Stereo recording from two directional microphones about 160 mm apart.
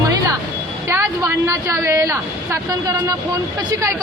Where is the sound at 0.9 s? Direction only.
20° right (ahead or behind).